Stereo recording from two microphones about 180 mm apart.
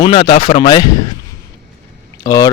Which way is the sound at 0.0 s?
25° left (ahead or behind).